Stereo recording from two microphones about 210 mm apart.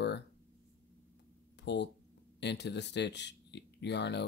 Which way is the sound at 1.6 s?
55° left (ahead or behind).